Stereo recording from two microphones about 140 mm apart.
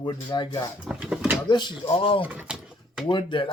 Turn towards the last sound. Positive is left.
turn(degrees=35)  # may be behind; listen again after turning